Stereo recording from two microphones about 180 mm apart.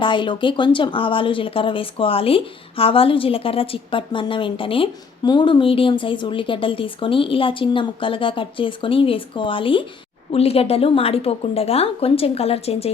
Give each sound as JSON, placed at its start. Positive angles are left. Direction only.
{"t": 0.0, "sound": "speech", "side_deg": 25}